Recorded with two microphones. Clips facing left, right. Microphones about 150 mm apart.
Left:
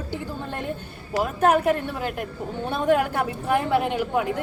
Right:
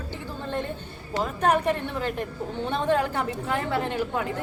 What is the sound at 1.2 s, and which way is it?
A woman's voice, 10° left (ahead or behind).